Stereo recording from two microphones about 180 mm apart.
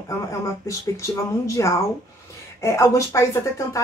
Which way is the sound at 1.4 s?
15° left (ahead or behind).